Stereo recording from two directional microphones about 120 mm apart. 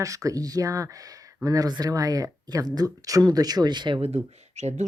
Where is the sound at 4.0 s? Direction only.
65° right (ahead or behind).